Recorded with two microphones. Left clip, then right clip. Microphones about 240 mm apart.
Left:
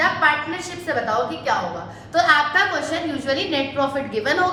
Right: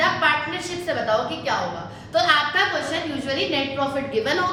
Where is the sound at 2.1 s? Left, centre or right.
Centre.